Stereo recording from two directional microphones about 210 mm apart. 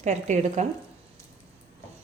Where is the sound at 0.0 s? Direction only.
35° right (ahead or behind).